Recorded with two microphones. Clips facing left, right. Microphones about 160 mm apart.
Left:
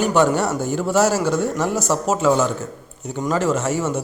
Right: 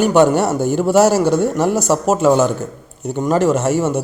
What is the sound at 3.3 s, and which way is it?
Speech, 65° right (ahead or behind).